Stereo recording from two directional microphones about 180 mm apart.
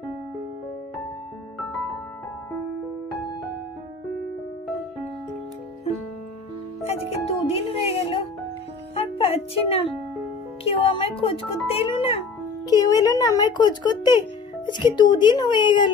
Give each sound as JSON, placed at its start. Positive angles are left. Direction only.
{"t": 6.9, "sound": "a child's voice", "side_deg": 35}
{"t": 12.6, "sound": "speech", "side_deg": 20}